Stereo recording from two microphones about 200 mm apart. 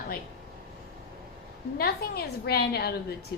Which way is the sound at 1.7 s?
50° left (ahead or behind).